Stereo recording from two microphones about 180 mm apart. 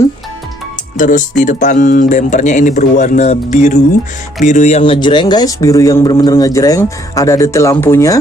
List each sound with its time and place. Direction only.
0.9 s speech: 45° left (ahead or behind); by 8.2 s 15° left (ahead or behind)